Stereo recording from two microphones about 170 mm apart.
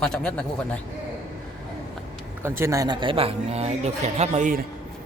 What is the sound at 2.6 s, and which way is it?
Speech, 20° right (ahead or behind).